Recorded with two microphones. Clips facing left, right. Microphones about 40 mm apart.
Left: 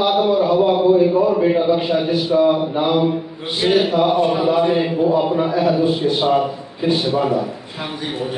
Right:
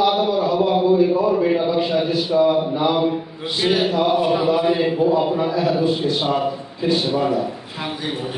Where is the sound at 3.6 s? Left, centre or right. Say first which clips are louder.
Left 3 dB; centre.